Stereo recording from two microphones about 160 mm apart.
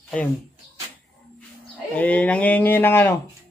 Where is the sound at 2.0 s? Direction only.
10° left (ahead or behind).